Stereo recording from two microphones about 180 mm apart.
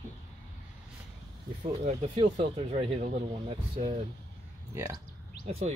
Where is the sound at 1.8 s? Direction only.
35° right (ahead or behind).